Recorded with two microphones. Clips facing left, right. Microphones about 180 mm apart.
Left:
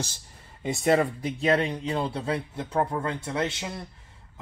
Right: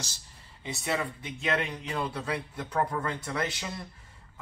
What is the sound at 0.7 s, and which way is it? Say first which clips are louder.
Speech: left 9 dB; 50° left (ahead or behind).